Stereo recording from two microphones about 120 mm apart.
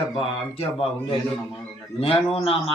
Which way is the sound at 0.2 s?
50° left (ahead or behind).